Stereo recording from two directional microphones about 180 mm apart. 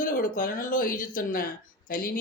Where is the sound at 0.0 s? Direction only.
50° left (ahead or behind).